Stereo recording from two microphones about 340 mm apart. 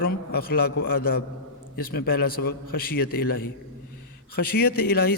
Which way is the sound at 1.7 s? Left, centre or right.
Left.